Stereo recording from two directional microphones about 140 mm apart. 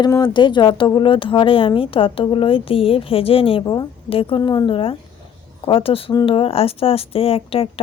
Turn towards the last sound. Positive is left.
turn(degrees=45)  # may be behind; listen again after turning